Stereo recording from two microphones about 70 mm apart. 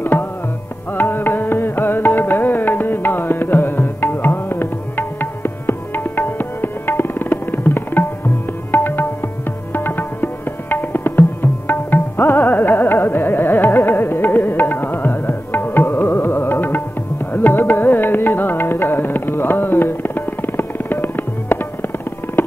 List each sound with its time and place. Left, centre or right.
0.0 s tabla: left
0.9 s music: left